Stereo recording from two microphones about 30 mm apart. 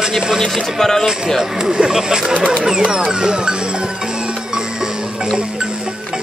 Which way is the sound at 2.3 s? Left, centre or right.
Right.